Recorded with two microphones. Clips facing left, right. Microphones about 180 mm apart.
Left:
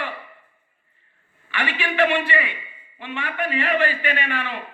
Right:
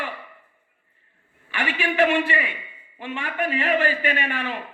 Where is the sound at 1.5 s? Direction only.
45° right (ahead or behind).